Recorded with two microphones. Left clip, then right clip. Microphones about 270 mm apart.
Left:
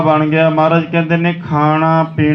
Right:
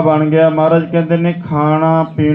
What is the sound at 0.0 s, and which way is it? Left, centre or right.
Mantra, left.